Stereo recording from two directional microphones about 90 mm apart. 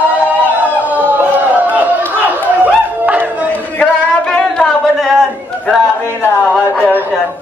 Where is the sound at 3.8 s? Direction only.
10° left (ahead or behind).